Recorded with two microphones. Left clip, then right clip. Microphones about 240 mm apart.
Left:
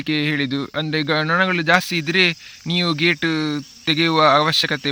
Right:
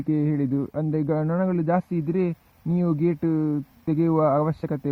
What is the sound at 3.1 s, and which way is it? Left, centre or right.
Speech, left.